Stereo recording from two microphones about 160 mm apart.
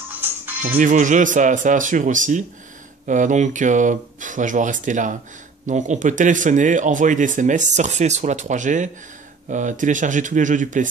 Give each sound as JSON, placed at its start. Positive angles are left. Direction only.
{"t": 0.1, "sound": "music", "side_deg": -10}
{"t": 0.7, "sound": "speech", "side_deg": -60}